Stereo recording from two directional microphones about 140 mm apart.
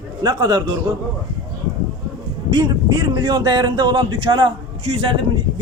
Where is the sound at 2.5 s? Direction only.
30° right (ahead or behind).